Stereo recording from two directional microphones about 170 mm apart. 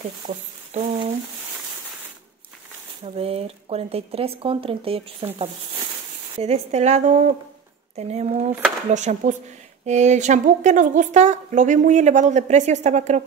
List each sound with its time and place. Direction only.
0.3 s speech: 40° right (ahead or behind)
3.0 s a woman's voice: 35° right (ahead or behind)